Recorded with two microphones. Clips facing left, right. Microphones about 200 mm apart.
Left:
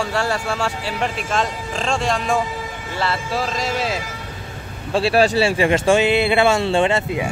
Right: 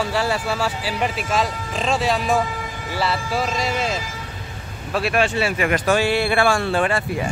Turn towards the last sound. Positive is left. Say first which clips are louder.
# left 3 dB
turn(degrees=25)  # may be behind; listen again after turning